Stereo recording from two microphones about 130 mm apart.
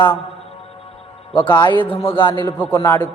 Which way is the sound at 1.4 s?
35° left (ahead or behind).